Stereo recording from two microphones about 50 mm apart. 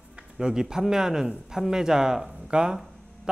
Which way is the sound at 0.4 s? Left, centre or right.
Centre.